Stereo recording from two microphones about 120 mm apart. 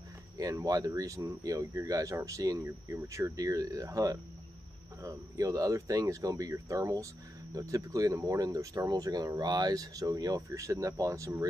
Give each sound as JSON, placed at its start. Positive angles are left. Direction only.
{"t": 0.4, "sound": "speech", "side_deg": -30}